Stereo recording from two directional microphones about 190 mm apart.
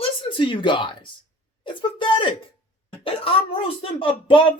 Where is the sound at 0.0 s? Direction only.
25° left (ahead or behind).